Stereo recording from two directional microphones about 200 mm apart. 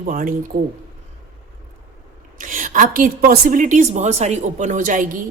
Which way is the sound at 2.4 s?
40° right (ahead or behind).